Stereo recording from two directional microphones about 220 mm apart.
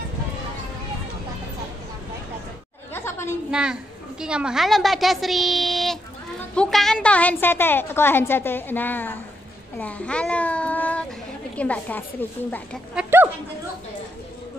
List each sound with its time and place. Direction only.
2.9 s chatter: 10° left (ahead or behind)
3.5 s a woman's voice: 5° right (ahead or behind)
12.9 s speech: 10° right (ahead or behind)